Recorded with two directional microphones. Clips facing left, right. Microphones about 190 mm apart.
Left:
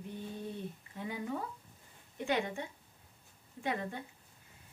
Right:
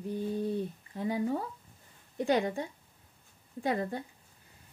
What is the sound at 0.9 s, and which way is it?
Speech, 35° right (ahead or behind).